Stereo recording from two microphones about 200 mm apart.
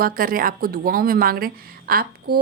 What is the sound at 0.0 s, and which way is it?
A woman's voice, 45° right (ahead or behind).